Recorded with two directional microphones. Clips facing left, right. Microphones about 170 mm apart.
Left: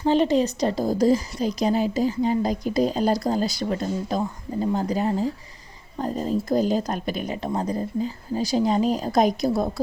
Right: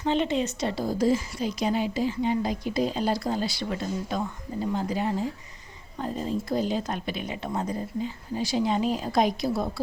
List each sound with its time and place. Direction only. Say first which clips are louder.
0.0 s a woman's voice: left 6 dB; 40° left (ahead or behind)